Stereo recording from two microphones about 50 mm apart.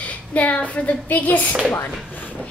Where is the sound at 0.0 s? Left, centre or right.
Left.